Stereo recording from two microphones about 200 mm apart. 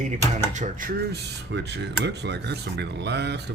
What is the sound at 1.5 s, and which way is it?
Speech, 60° right (ahead or behind).